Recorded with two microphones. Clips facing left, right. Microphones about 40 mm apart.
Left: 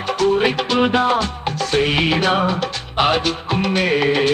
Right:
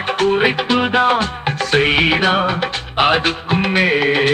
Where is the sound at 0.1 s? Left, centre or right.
Right.